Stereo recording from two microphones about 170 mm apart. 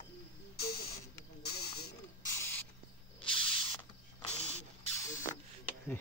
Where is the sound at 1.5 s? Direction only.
30° left (ahead or behind); by 3.5 s 5° left (ahead or behind).